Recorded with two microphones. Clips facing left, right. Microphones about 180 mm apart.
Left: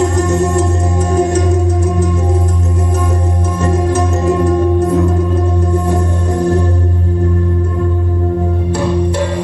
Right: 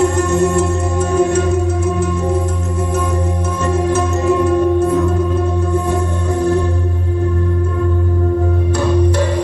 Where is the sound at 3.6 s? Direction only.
40° left (ahead or behind).